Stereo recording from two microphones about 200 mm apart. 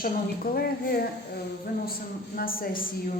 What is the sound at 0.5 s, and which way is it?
Speech, 50° left (ahead or behind).